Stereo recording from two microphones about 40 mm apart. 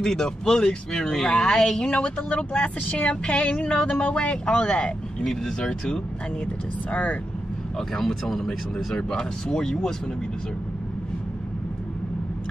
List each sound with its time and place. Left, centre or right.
0.0 s speech: centre
5.2 s speech: centre
6.4 s speech: left
7.9 s speech: centre
8.5 s speech: centre